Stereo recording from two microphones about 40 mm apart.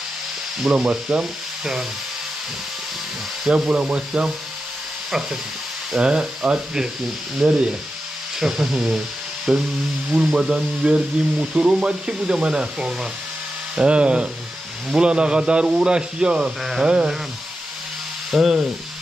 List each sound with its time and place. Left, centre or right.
0.6 s speech: right
3.5 s speech: right
6.0 s speech: right
8.4 s speech: centre
16.6 s speech: centre
18.3 s rub: centre